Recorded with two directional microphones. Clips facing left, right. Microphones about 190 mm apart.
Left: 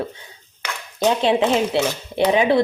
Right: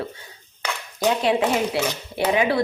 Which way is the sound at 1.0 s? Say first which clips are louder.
Left 3 dB; 25° left (ahead or behind).